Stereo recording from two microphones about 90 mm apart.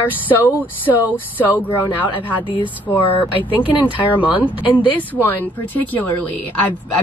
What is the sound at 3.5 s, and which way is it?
Speech, 65° left (ahead or behind).